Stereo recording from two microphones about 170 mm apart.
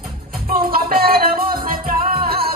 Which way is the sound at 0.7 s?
60° right (ahead or behind).